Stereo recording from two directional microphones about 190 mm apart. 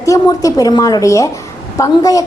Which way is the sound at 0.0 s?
15° left (ahead or behind).